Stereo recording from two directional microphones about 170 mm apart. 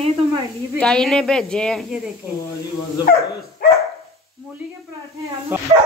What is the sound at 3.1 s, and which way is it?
Speech, 60° left (ahead or behind).